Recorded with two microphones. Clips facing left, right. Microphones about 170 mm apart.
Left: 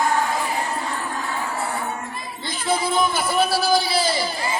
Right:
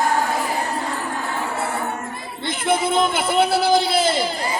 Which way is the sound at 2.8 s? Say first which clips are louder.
Right 2 dB; 25° right (ahead or behind).